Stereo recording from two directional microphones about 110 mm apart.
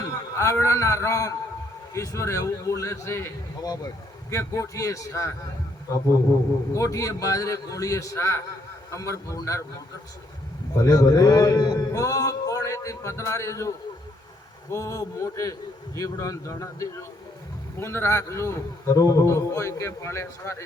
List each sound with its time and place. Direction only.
0.0 s a man's voice: 30° left (ahead or behind)
6.7 s a man's voice: 30° left (ahead or behind)
10.8 s a man's voice: 35° left (ahead or behind)